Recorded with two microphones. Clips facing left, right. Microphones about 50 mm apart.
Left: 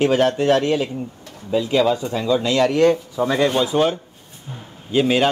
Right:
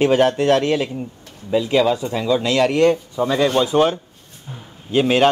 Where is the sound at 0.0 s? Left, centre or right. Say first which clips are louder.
Right 2 dB; right.